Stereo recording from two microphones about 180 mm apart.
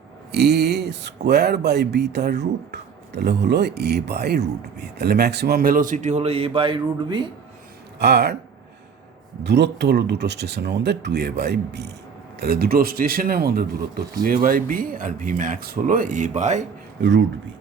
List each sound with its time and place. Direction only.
0.3 s speech: 65° right (ahead or behind); by 7.3 s 25° right (ahead or behind)
7.9 s speech: 65° right (ahead or behind)
9.4 s speech: 70° right (ahead or behind); by 16.6 s 40° right (ahead or behind)
17.0 s speech: 90° right